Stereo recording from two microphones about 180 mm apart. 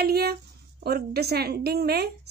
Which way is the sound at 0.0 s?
60° right (ahead or behind).